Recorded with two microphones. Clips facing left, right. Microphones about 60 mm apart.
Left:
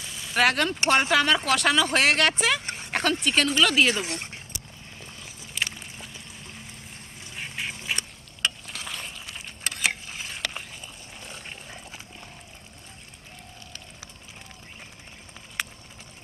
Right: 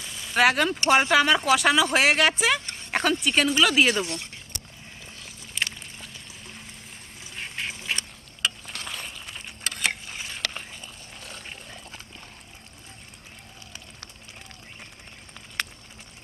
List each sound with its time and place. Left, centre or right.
0.0 s vehicle: centre
1.1 s speech: centre
2.6 s a sound: left
2.9 s speech: centre
3.9 s speech: left
5.2 s a sound: centre
7.2 s duck: centre
11.1 s water: centre
15.6 s a sound: centre